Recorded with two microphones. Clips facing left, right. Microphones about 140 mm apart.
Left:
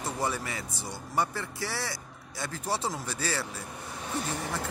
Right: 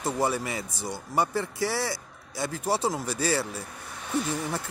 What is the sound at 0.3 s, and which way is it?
Speech, 15° right (ahead or behind).